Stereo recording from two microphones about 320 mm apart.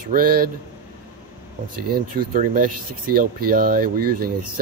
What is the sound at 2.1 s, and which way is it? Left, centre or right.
Speech, right.